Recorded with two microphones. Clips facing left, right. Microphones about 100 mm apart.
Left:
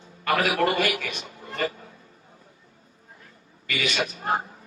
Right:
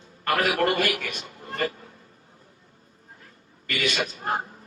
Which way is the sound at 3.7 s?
50° right (ahead or behind).